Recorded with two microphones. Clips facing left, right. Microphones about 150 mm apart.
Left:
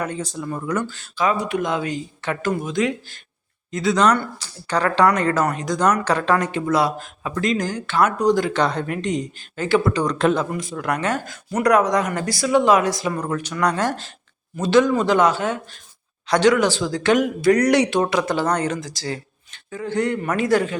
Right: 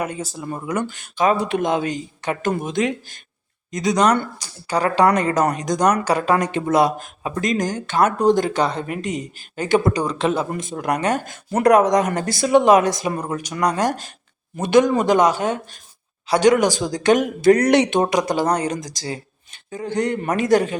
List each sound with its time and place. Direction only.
0.0 s speech: 10° right (ahead or behind)
1.3 s speech: 30° right (ahead or behind)
4.0 s speech: 30° right (ahead or behind)
4.4 s speech: 10° right (ahead or behind)
8.5 s speech: 5° right (ahead or behind)
10.8 s speech: 20° right (ahead or behind)